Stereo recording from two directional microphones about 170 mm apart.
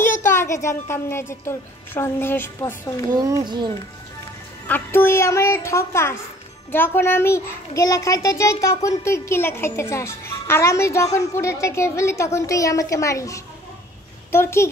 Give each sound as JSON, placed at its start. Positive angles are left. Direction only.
{"t": 0.2, "sound": "a child's voice", "side_deg": 15}
{"t": 3.2, "sound": "speech", "side_deg": -25}
{"t": 4.6, "sound": "a child's voice", "side_deg": 10}